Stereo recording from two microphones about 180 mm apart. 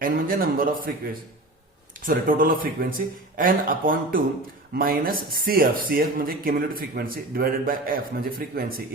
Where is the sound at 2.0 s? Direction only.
50° right (ahead or behind).